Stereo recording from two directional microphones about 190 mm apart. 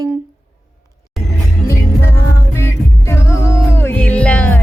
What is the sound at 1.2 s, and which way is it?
Music, centre (ahead or behind).